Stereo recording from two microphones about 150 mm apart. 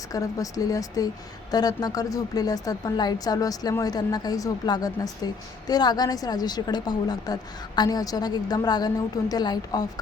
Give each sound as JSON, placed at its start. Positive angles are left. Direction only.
{"t": 0.1, "sound": "a woman's voice", "side_deg": 20}